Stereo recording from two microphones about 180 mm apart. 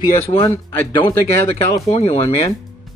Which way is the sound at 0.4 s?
15° left (ahead or behind).